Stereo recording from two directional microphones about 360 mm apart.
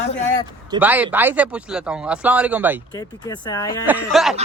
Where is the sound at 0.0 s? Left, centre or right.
Left.